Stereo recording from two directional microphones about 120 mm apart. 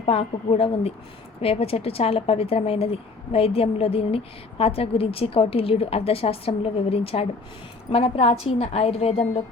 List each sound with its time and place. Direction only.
0.0 s a woman's voice: 55° left (ahead or behind)